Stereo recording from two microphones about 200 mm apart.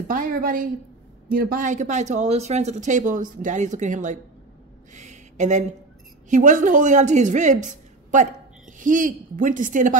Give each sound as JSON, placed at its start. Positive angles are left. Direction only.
{"t": 0.1, "sound": "speech", "side_deg": -45}
{"t": 4.9, "sound": "a sound", "side_deg": -35}
{"t": 6.3, "sound": "speech", "side_deg": -40}